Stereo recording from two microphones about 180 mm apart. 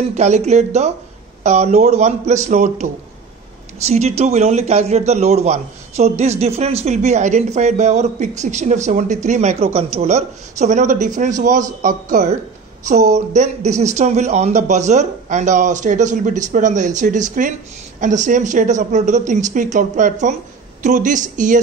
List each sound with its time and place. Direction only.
0.1 s a man's voice: 40° right (ahead or behind)